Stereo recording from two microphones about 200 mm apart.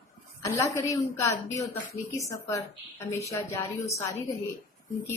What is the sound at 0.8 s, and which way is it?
A woman's voice, 15° left (ahead or behind).